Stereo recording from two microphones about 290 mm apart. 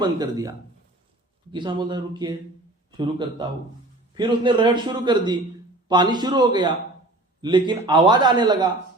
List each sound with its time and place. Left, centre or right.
0.0 s a man's voice: centre
1.5 s a man's voice: centre